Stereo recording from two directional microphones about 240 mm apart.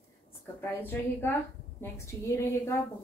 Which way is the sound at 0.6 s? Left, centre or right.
Centre.